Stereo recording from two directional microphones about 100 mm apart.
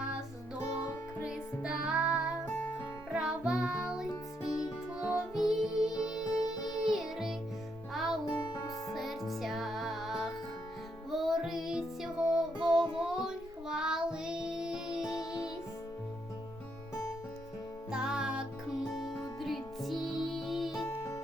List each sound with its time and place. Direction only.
0.6 s music: 35° left (ahead or behind)
1.2 s music: 10° right (ahead or behind)
6.3 s music: 40° left (ahead or behind)
6.8 s music: 5° right (ahead or behind)
8.3 s music: 50° left (ahead or behind)
8.9 s music: centre (ahead or behind)
12.7 s music: 55° right (ahead or behind)
13.1 s child singing: 5° right (ahead or behind)
17.9 s music: 5° right (ahead or behind)
20.8 s music: 25° left (ahead or behind)